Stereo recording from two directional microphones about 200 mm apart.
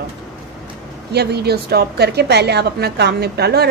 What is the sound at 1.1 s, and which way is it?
A woman's voice, 55° right (ahead or behind).